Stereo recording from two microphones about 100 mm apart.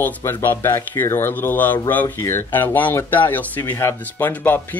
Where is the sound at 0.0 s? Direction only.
25° left (ahead or behind).